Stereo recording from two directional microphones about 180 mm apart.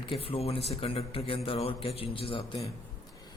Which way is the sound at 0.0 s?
30° left (ahead or behind).